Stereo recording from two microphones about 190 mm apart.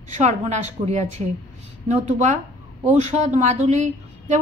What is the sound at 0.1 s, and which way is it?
A woman's voice, 35° right (ahead or behind).